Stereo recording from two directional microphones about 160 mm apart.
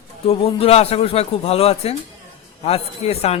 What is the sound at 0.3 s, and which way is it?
Speech, 40° left (ahead or behind).